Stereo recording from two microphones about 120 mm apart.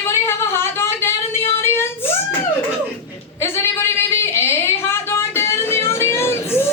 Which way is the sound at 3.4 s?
20° left (ahead or behind).